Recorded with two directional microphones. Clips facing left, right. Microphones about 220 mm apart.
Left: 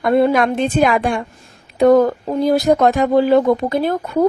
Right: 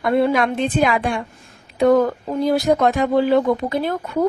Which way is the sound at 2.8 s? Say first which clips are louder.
Left 3 dB; 40° left (ahead or behind).